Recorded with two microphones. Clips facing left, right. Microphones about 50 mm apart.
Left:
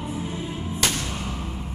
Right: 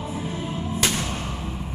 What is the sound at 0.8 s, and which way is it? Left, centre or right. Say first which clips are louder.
Music: even; centre.